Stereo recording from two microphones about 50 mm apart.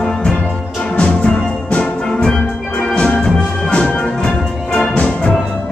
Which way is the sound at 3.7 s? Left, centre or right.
Centre.